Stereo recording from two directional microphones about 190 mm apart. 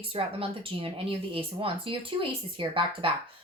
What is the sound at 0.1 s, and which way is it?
Speech, 30° right (ahead or behind).